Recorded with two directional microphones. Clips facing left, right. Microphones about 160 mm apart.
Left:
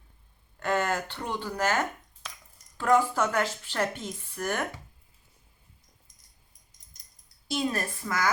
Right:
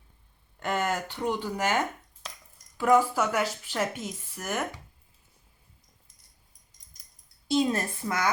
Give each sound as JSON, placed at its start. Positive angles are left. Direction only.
{"t": 0.6, "sound": "speech", "side_deg": -15}
{"t": 7.5, "sound": "a woman's voice", "side_deg": -20}